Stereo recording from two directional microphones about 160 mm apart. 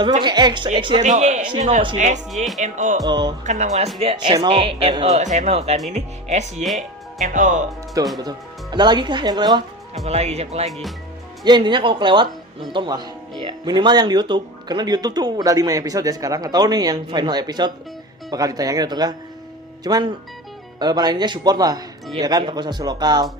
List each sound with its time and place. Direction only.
0.2 s speech: 25° right (ahead or behind)
1.0 s speech: 45° right (ahead or behind)
2.3 s speech: centre (ahead or behind)
2.6 s speech: 50° right (ahead or behind)
3.1 s speech: 25° right (ahead or behind)
3.4 s speech: 45° right (ahead or behind)
4.0 s speech: 35° right (ahead or behind); by 7.6 s 55° right (ahead or behind)
8.2 s speech: 25° right (ahead or behind)
10.1 s speech: 40° right (ahead or behind)
10.7 s speech: centre (ahead or behind)
11.4 s speech: 30° right (ahead or behind)